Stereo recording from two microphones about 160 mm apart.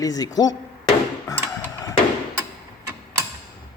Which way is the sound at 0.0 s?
20° left (ahead or behind).